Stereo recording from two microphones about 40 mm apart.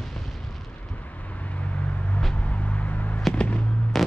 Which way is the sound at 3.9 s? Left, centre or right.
Centre.